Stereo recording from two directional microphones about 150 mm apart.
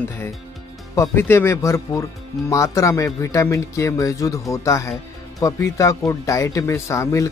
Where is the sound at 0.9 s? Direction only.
15° left (ahead or behind).